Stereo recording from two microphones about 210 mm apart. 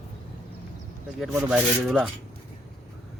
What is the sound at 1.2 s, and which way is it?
Speech, 5° right (ahead or behind).